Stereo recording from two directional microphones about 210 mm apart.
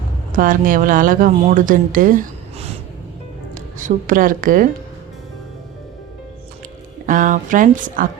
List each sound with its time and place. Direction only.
0.3 s a woman's voice: 40° right (ahead or behind)
7.0 s speech: 40° right (ahead or behind)